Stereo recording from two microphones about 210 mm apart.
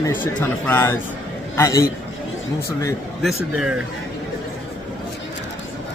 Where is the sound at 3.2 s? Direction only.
Centre (ahead or behind).